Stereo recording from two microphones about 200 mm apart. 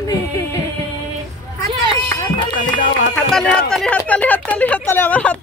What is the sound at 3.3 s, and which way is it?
Speech, 5° left (ahead or behind).